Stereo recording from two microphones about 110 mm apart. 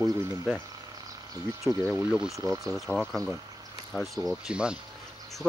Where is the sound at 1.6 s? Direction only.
Centre (ahead or behind).